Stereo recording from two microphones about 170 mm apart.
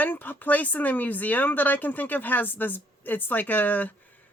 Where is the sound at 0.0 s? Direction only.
10° left (ahead or behind).